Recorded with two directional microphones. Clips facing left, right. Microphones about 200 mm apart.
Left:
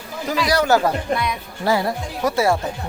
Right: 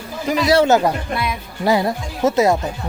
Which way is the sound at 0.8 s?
10° right (ahead or behind).